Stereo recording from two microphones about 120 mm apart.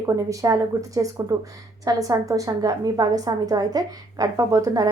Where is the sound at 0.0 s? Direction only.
25° right (ahead or behind).